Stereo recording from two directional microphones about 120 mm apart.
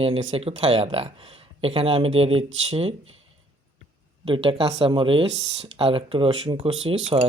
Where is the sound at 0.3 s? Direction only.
55° right (ahead or behind).